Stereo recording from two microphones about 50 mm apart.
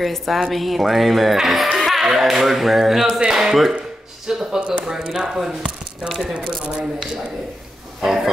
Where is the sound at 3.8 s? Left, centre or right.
Centre.